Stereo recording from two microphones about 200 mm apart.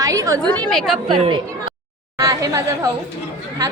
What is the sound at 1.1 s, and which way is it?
Speech, 25° right (ahead or behind).